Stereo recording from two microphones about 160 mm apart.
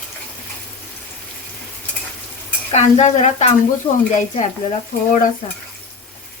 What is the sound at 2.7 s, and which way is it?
Speech, 45° left (ahead or behind).